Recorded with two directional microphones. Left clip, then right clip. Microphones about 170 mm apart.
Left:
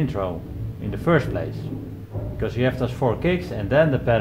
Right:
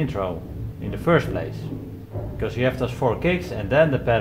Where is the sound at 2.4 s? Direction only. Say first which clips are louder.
Even; 30° left (ahead or behind).